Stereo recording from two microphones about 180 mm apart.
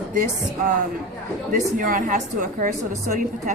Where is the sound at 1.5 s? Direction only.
50° right (ahead or behind).